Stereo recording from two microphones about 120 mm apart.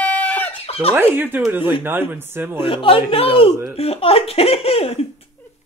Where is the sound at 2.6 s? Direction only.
45° left (ahead or behind).